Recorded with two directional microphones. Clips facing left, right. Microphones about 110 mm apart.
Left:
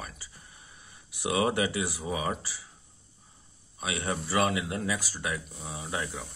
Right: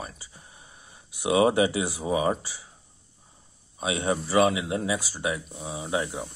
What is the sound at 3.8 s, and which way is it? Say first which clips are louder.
Speech: right 6 dB; 25° right (ahead or behind).